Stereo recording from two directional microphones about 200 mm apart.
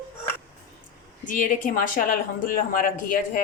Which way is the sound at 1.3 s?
40° left (ahead or behind).